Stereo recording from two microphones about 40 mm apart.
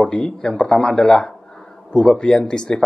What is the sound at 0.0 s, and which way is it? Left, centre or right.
Speech, centre.